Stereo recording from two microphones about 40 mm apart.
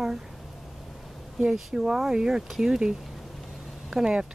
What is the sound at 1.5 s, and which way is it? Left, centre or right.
Speech, centre.